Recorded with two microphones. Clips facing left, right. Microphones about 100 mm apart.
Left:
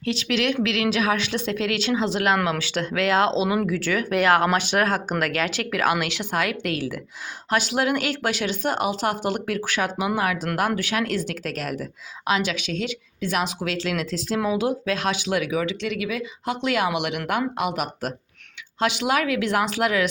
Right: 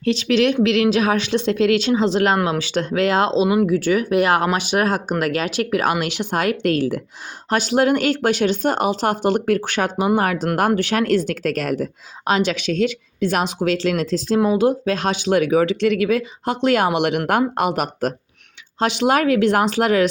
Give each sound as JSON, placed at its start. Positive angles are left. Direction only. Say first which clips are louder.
{"t": 0.0, "sound": "speech", "louder": "right 7 dB", "side_deg": -30}
{"t": 3.4, "sound": "speech", "louder": "right 6 dB", "side_deg": -15}
{"t": 6.3, "sound": "speech", "louder": "right 7 dB", "side_deg": -35}
{"t": 10.7, "sound": "speech", "louder": "right 7 dB", "side_deg": -30}
{"t": 10.9, "sound": "speech", "louder": "right 7 dB", "side_deg": -40}
{"t": 12.2, "sound": "speech", "louder": "right 5 dB", "side_deg": -35}
{"t": 15.3, "sound": "speech", "louder": "right 11 dB", "side_deg": -40}